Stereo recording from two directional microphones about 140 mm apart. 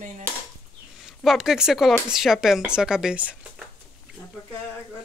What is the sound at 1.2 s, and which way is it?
Speech, 5° right (ahead or behind).